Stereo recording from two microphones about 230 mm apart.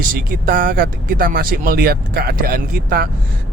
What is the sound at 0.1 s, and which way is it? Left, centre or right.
A man's voice, right.